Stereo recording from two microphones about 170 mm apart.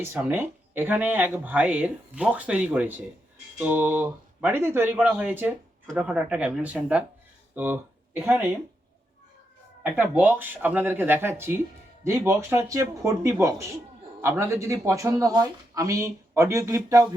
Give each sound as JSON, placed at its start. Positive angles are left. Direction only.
{"t": 0.0, "sound": "speech", "side_deg": -15}
{"t": 10.0, "sound": "speech", "side_deg": -10}